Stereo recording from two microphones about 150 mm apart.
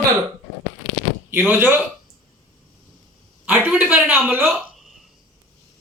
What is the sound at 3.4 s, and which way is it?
Speech, 5° right (ahead or behind).